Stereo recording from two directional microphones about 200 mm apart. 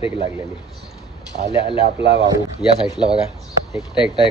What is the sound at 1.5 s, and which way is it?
Speech, 25° left (ahead or behind).